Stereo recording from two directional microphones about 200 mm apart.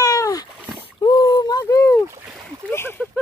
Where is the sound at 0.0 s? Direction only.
15° left (ahead or behind).